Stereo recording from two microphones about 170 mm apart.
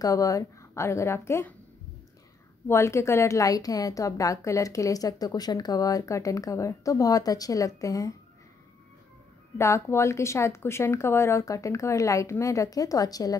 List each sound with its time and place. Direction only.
0.0 s speech: 20° left (ahead or behind)
2.7 s a woman's voice: 15° left (ahead or behind)
9.6 s speech: 15° left (ahead or behind)